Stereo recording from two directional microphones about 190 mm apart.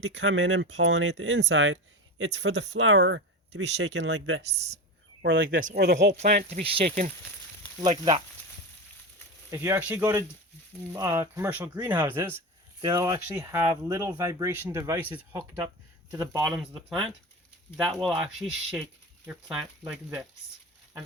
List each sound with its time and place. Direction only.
0.0 s speech: 70° right (ahead or behind)
5.5 s speech: 45° right (ahead or behind)
5.8 s speech: 60° right (ahead or behind)
6.5 s speech: 35° right (ahead or behind)
7.8 s speech: 25° right (ahead or behind)
9.5 s speech: 15° right (ahead or behind)
16.4 s speech: centre (ahead or behind)